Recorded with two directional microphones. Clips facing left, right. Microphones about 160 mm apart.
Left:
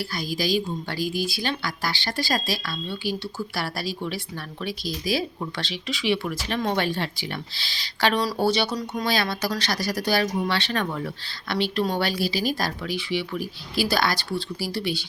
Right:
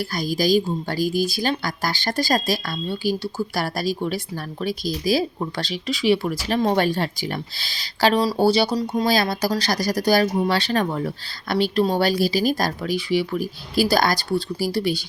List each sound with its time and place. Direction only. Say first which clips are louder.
0.0 s a woman's voice: right 5 dB; 45° right (ahead or behind)